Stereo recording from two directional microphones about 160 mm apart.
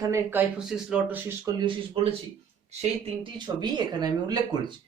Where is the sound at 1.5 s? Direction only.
25° right (ahead or behind).